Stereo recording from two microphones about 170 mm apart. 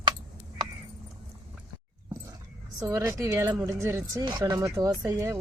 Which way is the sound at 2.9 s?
15° right (ahead or behind).